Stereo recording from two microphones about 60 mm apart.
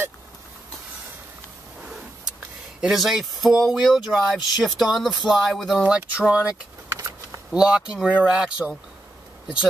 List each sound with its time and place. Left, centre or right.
2.8 s speech: centre
5.9 s speech: centre
7.5 s speech: centre